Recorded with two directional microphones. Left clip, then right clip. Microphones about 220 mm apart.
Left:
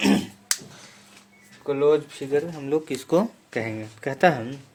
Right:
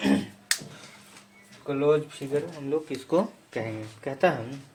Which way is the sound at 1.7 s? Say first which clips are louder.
Left 3 dB; 55° left (ahead or behind).